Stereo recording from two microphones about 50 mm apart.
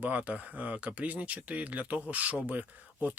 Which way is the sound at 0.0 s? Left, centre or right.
Right.